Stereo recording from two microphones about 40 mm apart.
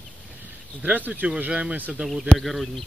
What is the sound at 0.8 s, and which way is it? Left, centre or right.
Speech, right.